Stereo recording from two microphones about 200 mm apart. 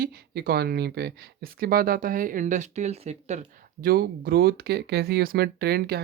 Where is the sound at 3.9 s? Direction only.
50° right (ahead or behind).